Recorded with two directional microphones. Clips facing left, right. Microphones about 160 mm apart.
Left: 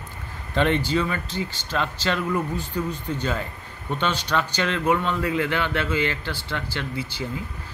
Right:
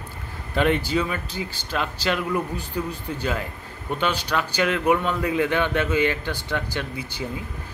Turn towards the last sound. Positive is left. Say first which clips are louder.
# even
turn(degrees=-15)  # may be behind; listen again after turning